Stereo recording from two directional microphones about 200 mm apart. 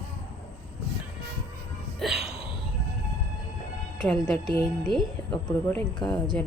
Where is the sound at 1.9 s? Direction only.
Centre (ahead or behind).